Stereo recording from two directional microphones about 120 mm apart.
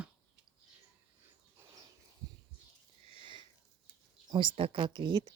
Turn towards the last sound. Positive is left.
turn(degrees=-40)  # may be behind; listen again after turning